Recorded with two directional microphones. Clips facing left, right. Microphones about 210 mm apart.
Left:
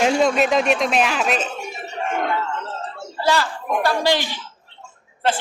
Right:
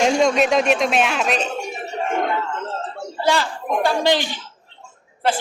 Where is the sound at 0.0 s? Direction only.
5° left (ahead or behind).